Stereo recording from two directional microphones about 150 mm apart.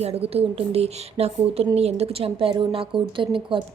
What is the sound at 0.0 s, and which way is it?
Speech, 40° right (ahead or behind).